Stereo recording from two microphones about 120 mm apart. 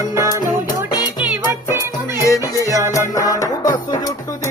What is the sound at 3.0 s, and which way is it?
Music, 30° left (ahead or behind).